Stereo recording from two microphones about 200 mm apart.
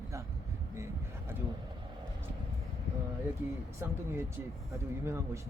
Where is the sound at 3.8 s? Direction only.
10° right (ahead or behind).